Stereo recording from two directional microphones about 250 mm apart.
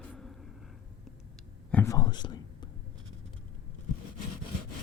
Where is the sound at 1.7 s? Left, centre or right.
Centre.